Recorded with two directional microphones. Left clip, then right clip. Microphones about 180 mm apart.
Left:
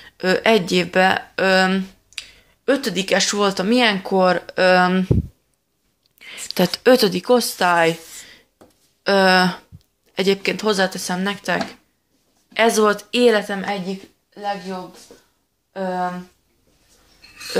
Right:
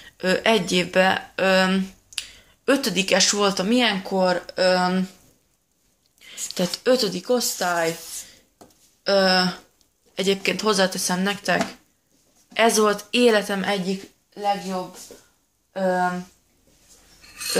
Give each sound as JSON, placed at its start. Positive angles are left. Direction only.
{"t": 0.0, "sound": "speech", "side_deg": 25}
{"t": 6.1, "sound": "speech", "side_deg": 35}
{"t": 10.1, "sound": "a woman's voice", "side_deg": 25}
{"t": 15.7, "sound": "speech", "side_deg": 5}